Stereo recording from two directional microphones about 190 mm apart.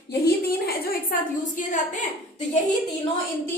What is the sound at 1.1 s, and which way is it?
Speech, 50° left (ahead or behind).